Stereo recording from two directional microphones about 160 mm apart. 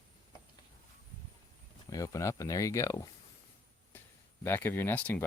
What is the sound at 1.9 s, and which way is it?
Speech, 20° left (ahead or behind).